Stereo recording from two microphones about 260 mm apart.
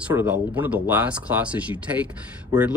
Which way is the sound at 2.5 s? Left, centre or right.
Centre.